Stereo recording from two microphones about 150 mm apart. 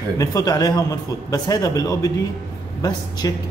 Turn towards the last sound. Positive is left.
turn(degrees=25)  # may be behind; listen again after turning